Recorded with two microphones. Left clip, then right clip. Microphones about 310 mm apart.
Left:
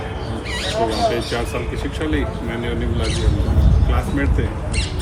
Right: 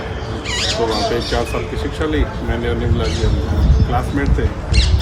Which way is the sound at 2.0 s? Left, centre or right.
Centre.